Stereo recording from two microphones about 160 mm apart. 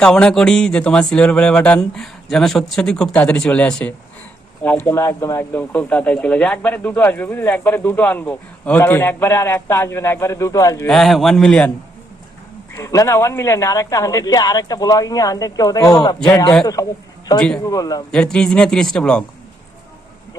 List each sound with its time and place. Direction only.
0.0 s speech: 5° left (ahead or behind); by 10.8 s 20° left (ahead or behind)
10.8 s speech: centre (ahead or behind)
12.7 s speech: 15° left (ahead or behind)
17.3 s speech: 5° left (ahead or behind)
17.7 s speech: 25° left (ahead or behind)
18.1 s speech: 5° left (ahead or behind)